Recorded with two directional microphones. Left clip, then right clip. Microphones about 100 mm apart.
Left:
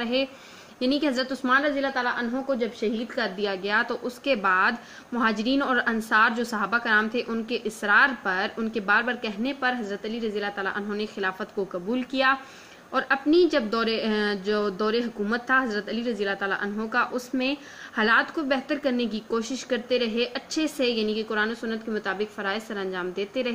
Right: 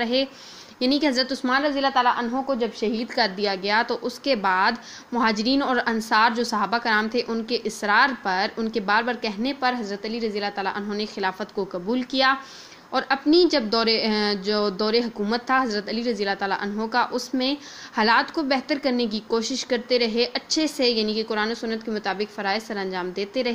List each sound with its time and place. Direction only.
0.0 s a woman's voice: 40° right (ahead or behind)